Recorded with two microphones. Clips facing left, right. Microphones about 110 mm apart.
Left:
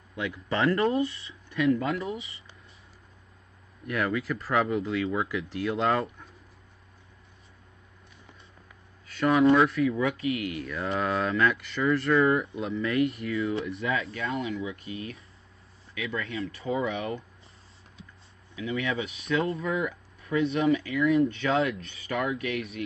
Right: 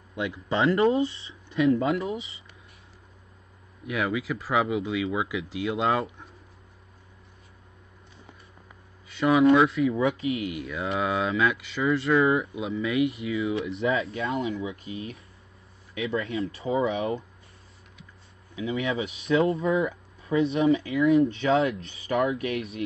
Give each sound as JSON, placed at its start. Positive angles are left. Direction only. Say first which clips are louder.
{"t": 0.1, "sound": "speech", "louder": "right 2 dB", "side_deg": -20}
{"t": 3.8, "sound": "speech", "louder": "right 1 dB", "side_deg": -10}
{"t": 9.0, "sound": "speech", "louder": "right 2 dB", "side_deg": -5}
{"t": 9.8, "sound": "speech", "louder": "right 2 dB", "side_deg": -25}
{"t": 10.5, "sound": "speech", "louder": "right 1 dB", "side_deg": -10}
{"t": 13.7, "sound": "speech", "louder": "right 4 dB", "side_deg": -30}
{"t": 18.6, "sound": "speech", "louder": "right 2 dB", "side_deg": -30}